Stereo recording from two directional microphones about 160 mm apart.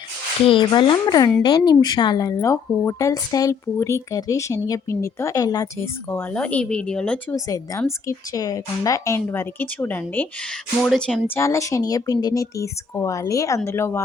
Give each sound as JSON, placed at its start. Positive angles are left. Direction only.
{"t": 0.4, "sound": "speech", "side_deg": 30}
{"t": 7.3, "sound": "speech", "side_deg": 20}
{"t": 11.3, "sound": "speech", "side_deg": 20}